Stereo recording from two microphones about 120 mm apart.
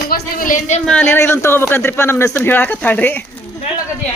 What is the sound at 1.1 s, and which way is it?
A man's voice, 20° left (ahead or behind).